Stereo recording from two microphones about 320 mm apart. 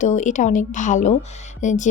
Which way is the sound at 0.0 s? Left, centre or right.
Left.